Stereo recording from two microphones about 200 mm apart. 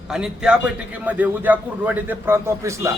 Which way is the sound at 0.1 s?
5° right (ahead or behind).